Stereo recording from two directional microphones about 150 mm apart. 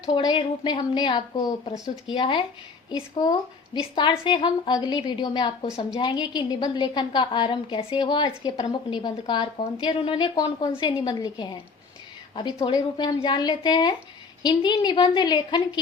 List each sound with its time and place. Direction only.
0.0 s a woman's voice: 30° left (ahead or behind)